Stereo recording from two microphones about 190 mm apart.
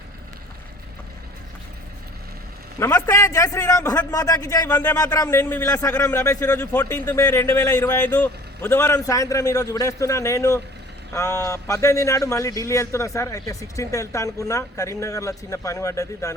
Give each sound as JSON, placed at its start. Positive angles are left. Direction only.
{"t": 2.7, "sound": "a man's voice", "side_deg": 15}